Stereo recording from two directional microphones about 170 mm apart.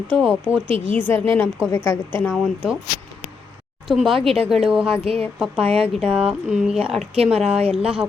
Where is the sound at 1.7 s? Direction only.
15° left (ahead or behind).